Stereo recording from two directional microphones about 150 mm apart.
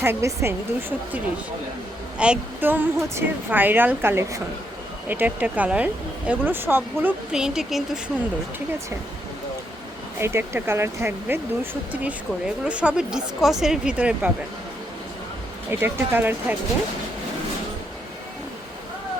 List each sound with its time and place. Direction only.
0.0 s speech: 15° right (ahead or behind); by 8.1 s centre (ahead or behind)
10.2 s speech: 15° right (ahead or behind)
15.7 s speech: 15° right (ahead or behind)